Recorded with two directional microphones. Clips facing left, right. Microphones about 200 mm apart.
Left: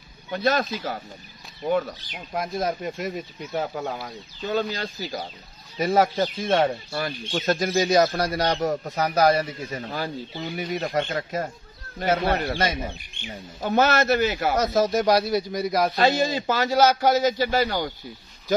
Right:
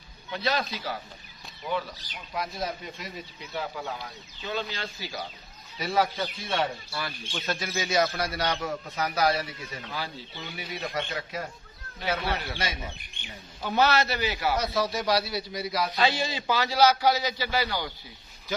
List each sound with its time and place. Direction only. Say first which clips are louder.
0.3 s speech: left 6 dB; 45° left (ahead or behind)